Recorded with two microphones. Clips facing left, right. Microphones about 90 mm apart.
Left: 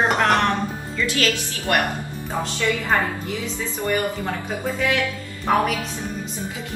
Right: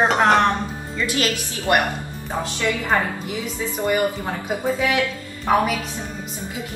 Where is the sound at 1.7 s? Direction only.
20° right (ahead or behind).